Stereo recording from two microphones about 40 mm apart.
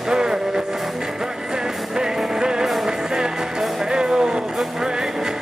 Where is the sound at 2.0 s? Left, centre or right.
Centre.